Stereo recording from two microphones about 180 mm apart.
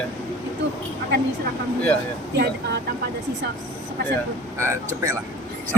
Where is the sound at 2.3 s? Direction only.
65° right (ahead or behind).